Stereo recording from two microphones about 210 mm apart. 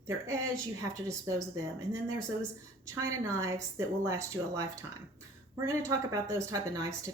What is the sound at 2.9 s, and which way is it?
A woman's voice, 15° right (ahead or behind).